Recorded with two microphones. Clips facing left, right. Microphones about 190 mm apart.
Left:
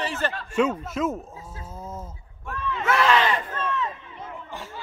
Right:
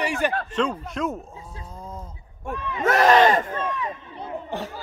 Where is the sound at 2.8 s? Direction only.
45° right (ahead or behind).